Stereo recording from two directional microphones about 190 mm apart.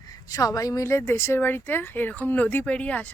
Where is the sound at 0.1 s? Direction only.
20° left (ahead or behind).